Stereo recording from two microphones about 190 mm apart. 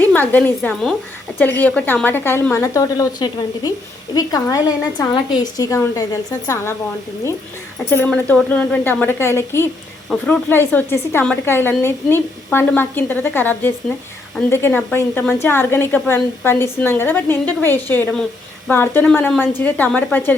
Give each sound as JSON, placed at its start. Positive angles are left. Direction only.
{"t": 0.0, "sound": "a woman's voice", "side_deg": 10}
{"t": 7.9, "sound": "a woman's voice", "side_deg": 10}